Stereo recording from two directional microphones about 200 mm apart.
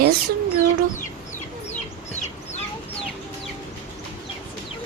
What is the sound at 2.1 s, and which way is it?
Chicken, 35° left (ahead or behind).